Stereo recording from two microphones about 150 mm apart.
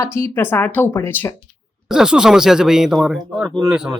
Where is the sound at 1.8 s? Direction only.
5° right (ahead or behind).